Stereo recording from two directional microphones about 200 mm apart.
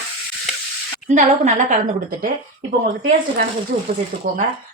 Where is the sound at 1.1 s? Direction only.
35° right (ahead or behind).